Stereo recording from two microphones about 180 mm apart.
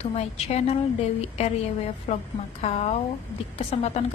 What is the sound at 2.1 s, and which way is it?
A woman's voice, 40° left (ahead or behind).